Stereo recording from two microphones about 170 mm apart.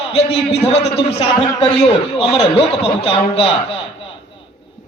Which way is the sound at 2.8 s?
35° left (ahead or behind).